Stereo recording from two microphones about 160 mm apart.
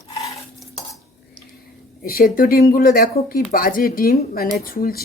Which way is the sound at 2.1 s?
65° left (ahead or behind).